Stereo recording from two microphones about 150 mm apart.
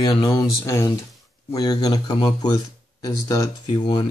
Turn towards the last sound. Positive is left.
turn(degrees=30)  # may be behind; listen again after turning